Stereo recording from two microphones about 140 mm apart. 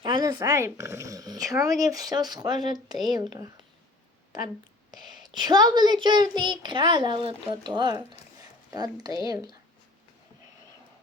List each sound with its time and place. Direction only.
0.0 s speech: 35° right (ahead or behind)
4.9 s a child's voice: 30° right (ahead or behind)